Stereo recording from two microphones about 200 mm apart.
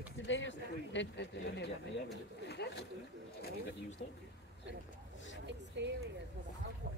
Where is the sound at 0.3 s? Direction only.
65° left (ahead or behind).